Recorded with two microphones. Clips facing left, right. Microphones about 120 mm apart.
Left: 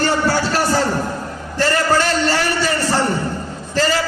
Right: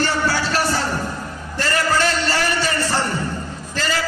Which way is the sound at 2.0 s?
35° left (ahead or behind).